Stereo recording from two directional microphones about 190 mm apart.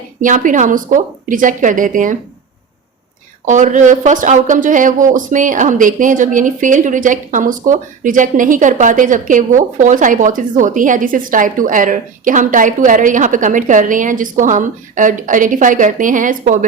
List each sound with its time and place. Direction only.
0.2 s speech: 45° right (ahead or behind)
3.4 s speech: 40° right (ahead or behind)